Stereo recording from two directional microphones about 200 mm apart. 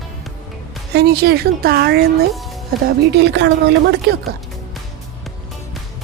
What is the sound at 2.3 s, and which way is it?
Music, centre (ahead or behind).